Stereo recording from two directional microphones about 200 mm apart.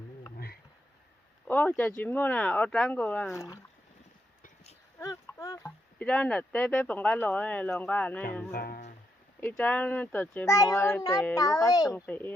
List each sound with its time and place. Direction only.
1.5 s speech: 10° left (ahead or behind)
4.9 s speech: 15° left (ahead or behind)
8.5 s music: 50° left (ahead or behind)
9.4 s speech: 5° left (ahead or behind)